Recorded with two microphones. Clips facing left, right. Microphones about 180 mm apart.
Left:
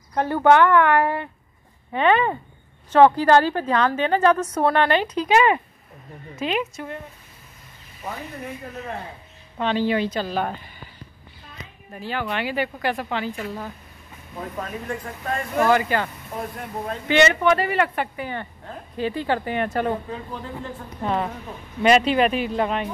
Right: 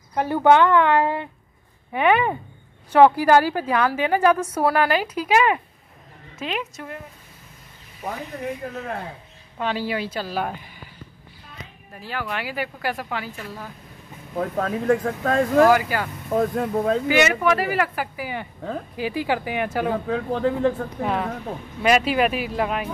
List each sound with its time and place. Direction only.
0.1 s a woman's voice: 10° right (ahead or behind)
9.6 s a woman's voice: 10° right (ahead or behind)
12.0 s speech: 5° right (ahead or behind)
14.3 s speech: 85° right
15.7 s a woman's voice: 5° right (ahead or behind)
16.3 s speech: 90° right
17.1 s speech: 5° right (ahead or behind)
20.1 s speech: 85° right
21.0 s speech: centre (ahead or behind)